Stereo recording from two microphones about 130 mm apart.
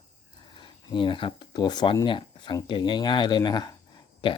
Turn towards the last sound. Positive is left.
turn(degrees=35)  # may be behind; listen again after turning